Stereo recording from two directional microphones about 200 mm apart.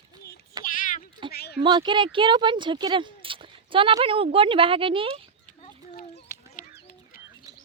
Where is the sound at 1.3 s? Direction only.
50° left (ahead or behind).